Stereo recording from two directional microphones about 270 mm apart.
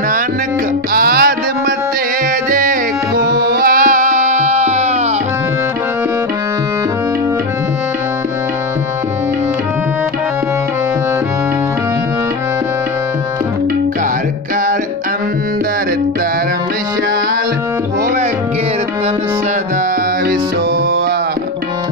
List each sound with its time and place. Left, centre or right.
0.9 s music: right
2.5 s music: right